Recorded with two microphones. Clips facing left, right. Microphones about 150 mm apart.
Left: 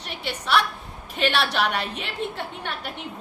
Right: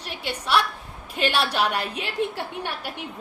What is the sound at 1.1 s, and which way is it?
A woman's voice, 10° right (ahead or behind).